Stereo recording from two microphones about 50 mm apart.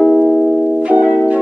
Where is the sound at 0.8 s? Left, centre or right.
Right.